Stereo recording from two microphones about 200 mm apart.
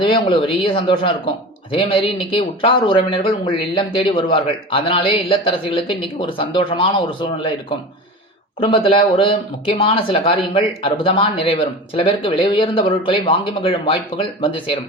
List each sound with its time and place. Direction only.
0.0 s speech: 25° left (ahead or behind)
8.6 s speech: 25° left (ahead or behind)